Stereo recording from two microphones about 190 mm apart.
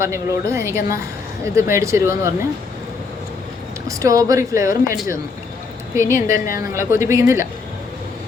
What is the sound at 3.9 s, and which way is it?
A woman's voice, 15° right (ahead or behind).